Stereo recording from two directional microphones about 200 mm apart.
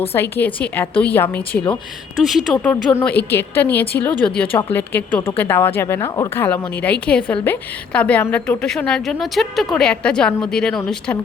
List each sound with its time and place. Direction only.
0.1 s a woman's voice: 10° left (ahead or behind)